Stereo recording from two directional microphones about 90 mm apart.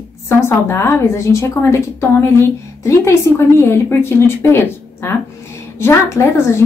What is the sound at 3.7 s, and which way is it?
A woman's voice, 30° left (ahead or behind).